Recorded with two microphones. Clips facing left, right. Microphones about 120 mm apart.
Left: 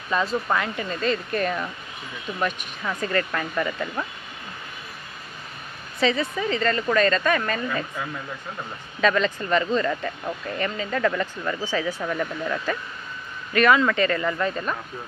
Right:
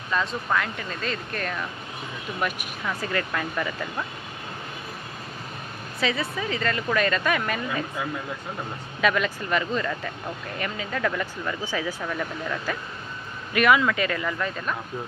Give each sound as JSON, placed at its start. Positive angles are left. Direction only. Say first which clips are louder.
{"t": 0.1, "sound": "speech", "louder": "left 2 dB", "side_deg": 5}
{"t": 2.4, "sound": "speech", "louder": "left 2 dB", "side_deg": -5}
{"t": 5.9, "sound": "speech", "louder": "left 4 dB", "side_deg": -5}
{"t": 9.0, "sound": "speech", "louder": "left 2 dB", "side_deg": -10}
{"t": 11.6, "sound": "speech", "louder": "left 4 dB", "side_deg": -10}
{"t": 12.0, "sound": "speech", "louder": "left 3 dB", "side_deg": 5}
{"t": 13.5, "sound": "speech", "louder": "left 1 dB", "side_deg": -10}